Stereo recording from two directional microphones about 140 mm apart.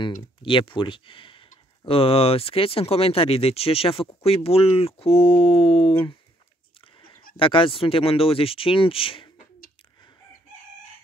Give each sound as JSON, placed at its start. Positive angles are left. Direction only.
{"t": 0.0, "sound": "speech", "side_deg": 35}
{"t": 7.3, "sound": "speech", "side_deg": 40}